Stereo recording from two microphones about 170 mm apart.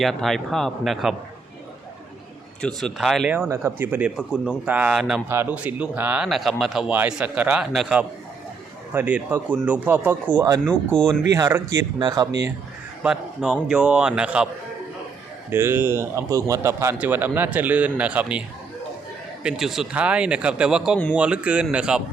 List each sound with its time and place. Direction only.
0.0 s speech: centre (ahead or behind)
2.6 s speech: 5° left (ahead or behind)
3.5 s a man's voice: 15° right (ahead or behind)
13.0 s speech: 5° right (ahead or behind)
15.4 s a man's voice: 15° right (ahead or behind)